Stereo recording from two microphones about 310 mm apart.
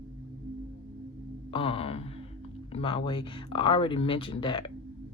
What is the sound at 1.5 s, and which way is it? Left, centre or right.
Speech, centre.